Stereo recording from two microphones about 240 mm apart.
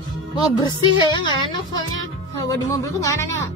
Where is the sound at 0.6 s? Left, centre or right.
Centre.